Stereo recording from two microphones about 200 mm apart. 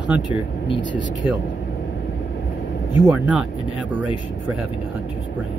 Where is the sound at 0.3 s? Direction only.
25° left (ahead or behind).